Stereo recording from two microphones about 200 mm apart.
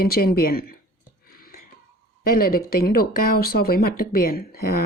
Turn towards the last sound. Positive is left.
turn(degrees=45)  # may be behind; listen again after turning